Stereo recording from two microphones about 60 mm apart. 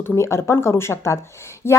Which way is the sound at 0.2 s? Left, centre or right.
Left.